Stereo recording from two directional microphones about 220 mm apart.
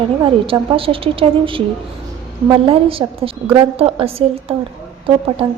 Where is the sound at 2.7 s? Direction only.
25° right (ahead or behind).